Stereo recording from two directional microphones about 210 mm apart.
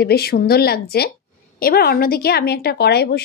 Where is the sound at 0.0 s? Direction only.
45° left (ahead or behind).